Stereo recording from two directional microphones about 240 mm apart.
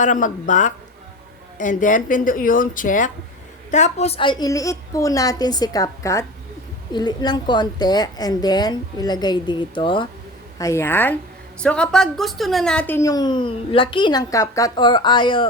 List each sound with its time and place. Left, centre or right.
0.0 s a woman's voice: left